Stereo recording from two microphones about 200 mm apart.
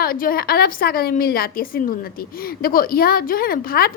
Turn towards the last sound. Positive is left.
turn(degrees=50)  # may be behind; listen again after turning